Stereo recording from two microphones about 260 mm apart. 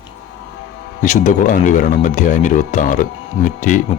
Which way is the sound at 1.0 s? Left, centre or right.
Left.